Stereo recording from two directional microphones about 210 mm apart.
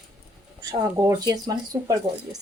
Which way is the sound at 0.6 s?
15° right (ahead or behind).